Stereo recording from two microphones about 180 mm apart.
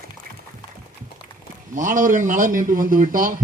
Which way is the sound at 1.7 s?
45° right (ahead or behind).